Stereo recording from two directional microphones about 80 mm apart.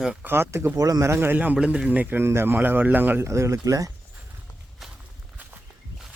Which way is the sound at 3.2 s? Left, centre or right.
Right.